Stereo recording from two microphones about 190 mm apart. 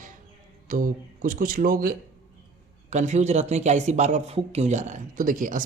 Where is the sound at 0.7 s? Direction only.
45° right (ahead or behind).